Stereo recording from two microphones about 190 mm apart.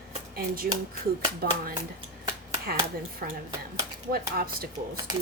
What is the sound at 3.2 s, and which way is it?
A woman's voice, 50° right (ahead or behind).